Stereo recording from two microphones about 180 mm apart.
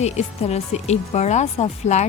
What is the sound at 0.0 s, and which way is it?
Speech, 35° left (ahead or behind).